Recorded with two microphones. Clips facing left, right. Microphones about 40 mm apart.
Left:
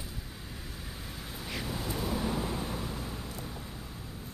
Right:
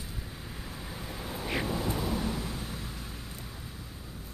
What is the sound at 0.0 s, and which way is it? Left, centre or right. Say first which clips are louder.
Vehicle: right 1 dB; centre.